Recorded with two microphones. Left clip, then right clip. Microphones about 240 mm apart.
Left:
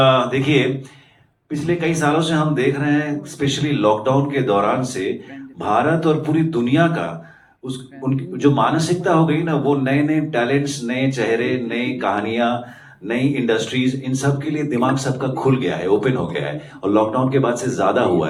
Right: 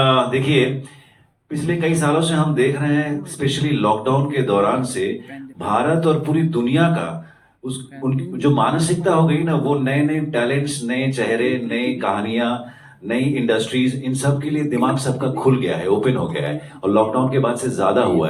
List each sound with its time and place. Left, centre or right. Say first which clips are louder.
0.0 s a man's voice: left 1 dB; left
1.6 s a man's voice: left 1 dB; left
8.4 s a man's voice: left 1 dB; left